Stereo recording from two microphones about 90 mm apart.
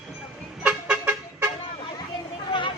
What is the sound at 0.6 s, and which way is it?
Vehicle, 10° right (ahead or behind).